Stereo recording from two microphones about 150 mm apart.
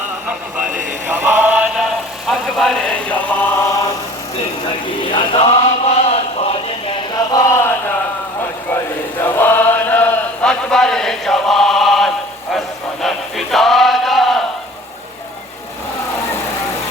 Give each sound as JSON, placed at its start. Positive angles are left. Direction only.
{"t": 1.0, "sound": "chant", "side_deg": -15}
{"t": 5.1, "sound": "chant", "side_deg": 35}